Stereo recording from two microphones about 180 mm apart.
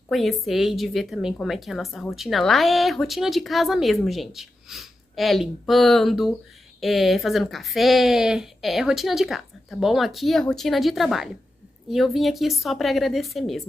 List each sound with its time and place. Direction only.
0.1 s a woman's voice: centre (ahead or behind)